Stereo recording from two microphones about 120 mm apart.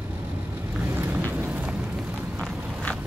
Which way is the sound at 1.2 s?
15° right (ahead or behind).